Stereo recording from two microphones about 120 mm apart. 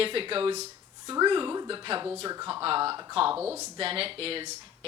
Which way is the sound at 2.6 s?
50° right (ahead or behind).